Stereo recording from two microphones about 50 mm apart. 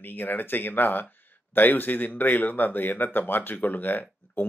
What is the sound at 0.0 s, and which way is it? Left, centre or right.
Speech, left.